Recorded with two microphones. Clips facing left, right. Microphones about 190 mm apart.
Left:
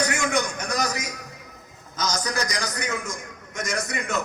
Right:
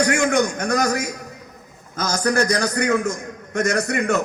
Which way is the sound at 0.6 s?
55° right (ahead or behind).